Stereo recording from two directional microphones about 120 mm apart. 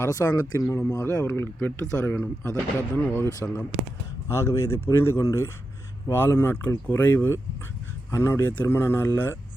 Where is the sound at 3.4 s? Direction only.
20° left (ahead or behind).